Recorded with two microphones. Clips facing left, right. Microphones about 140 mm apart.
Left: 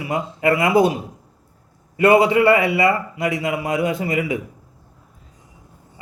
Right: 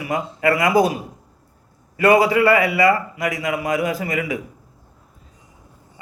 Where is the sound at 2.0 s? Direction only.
25° left (ahead or behind).